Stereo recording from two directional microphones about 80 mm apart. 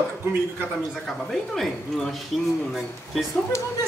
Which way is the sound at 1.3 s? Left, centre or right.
Centre.